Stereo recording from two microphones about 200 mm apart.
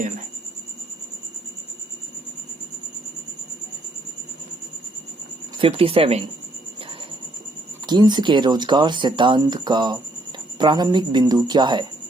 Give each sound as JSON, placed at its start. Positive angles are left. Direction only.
{"t": 5.5, "sound": "speech", "side_deg": -25}
{"t": 7.9, "sound": "speech", "side_deg": -20}